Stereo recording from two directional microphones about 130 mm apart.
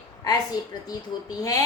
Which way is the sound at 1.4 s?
30° left (ahead or behind).